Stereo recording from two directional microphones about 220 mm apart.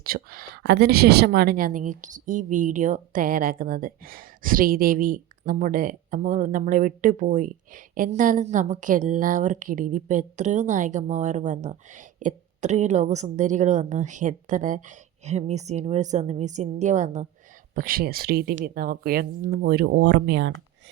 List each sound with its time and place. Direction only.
0.0 s a woman's voice: 40° right (ahead or behind)